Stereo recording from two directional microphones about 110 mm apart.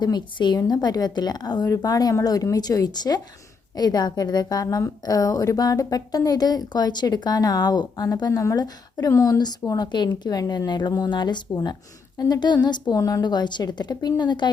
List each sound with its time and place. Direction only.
0.0 s a woman's voice: 40° left (ahead or behind)
12.9 s a woman's voice: 30° left (ahead or behind)